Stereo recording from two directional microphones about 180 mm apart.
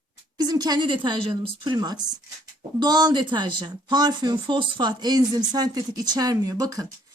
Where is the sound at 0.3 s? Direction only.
20° right (ahead or behind).